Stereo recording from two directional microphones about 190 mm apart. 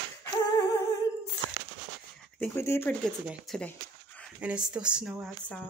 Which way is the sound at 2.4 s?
15° left (ahead or behind).